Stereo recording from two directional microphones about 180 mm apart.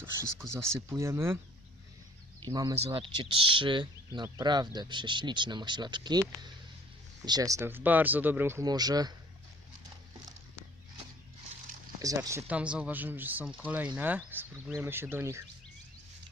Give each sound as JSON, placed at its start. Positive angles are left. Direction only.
{"t": 0.0, "sound": "speech", "side_deg": -15}
{"t": 2.4, "sound": "speech", "side_deg": -25}
{"t": 11.9, "sound": "speech", "side_deg": -15}